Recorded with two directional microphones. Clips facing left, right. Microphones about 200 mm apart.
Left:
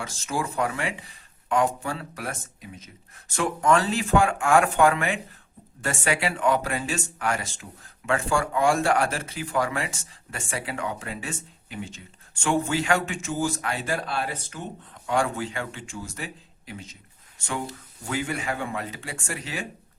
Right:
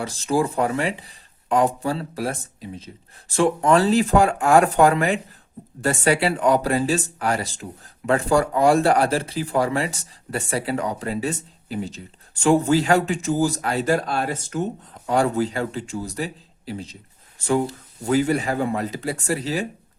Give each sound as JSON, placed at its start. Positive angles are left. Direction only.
{"t": 0.0, "sound": "speech", "side_deg": -35}